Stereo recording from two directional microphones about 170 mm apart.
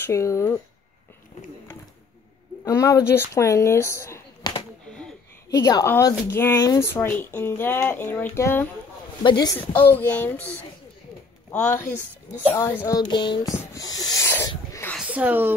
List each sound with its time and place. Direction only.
0.0 s speech: 15° left (ahead or behind)
2.6 s speech: 20° left (ahead or behind)
9.2 s speech: 25° left (ahead or behind)
9.7 s speech: 10° left (ahead or behind)
12.8 s speech: 25° left (ahead or behind)
14.7 s a sound: 15° left (ahead or behind)
15.0 s speech: 10° right (ahead or behind)